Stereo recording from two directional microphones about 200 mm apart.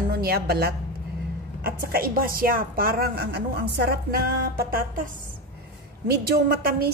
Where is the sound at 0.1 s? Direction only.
50° right (ahead or behind).